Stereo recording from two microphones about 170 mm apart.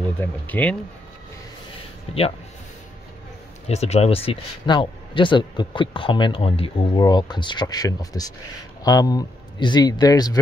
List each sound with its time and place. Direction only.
0.2 s speech: 10° left (ahead or behind)
3.6 s speech: 40° left (ahead or behind); by 10.4 s 20° left (ahead or behind)